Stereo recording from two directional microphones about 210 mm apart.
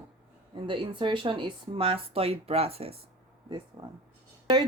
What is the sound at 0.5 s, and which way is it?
Speech, 25° right (ahead or behind).